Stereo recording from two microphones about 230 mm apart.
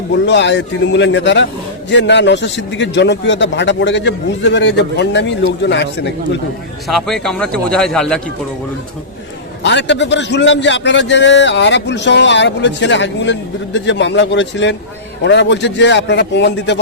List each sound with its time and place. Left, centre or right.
0.3 s a man's voice: left
6.8 s a man's voice: centre
9.6 s a man's voice: left